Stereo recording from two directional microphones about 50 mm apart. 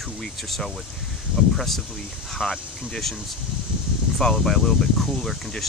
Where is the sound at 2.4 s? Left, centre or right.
Centre.